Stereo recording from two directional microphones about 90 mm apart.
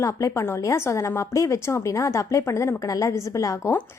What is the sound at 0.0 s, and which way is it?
A woman's voice, 35° left (ahead or behind).